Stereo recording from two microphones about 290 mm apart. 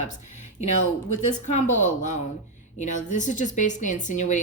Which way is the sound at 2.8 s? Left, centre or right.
Left.